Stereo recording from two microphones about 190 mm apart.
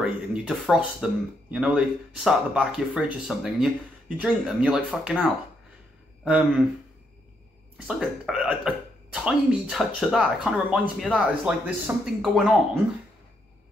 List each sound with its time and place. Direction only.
0.0 s speech: centre (ahead or behind)
6.2 s speech: 5° right (ahead or behind)
7.7 s speech: 5° right (ahead or behind)